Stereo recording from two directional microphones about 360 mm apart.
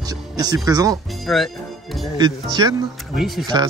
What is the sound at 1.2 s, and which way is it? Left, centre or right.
Speech, centre.